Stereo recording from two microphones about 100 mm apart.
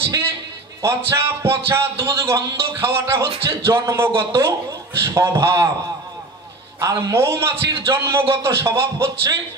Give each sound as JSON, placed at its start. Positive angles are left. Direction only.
{"t": 0.8, "sound": "a man's voice", "side_deg": -25}
{"t": 6.8, "sound": "a man's voice", "side_deg": -35}